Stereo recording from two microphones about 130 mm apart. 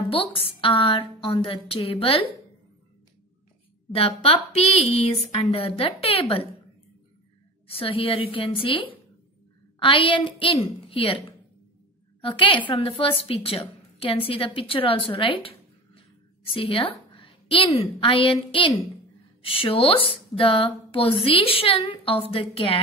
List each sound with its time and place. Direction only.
0.1 s speech: 45° left (ahead or behind)
3.9 s speech: 50° left (ahead or behind)
7.6 s a woman's voice: 45° left (ahead or behind)